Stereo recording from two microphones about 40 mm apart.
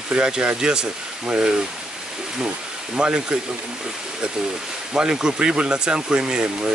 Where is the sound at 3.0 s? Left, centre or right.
Right.